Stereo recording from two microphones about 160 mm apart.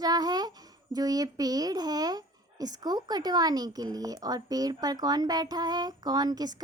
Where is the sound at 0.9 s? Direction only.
25° right (ahead or behind).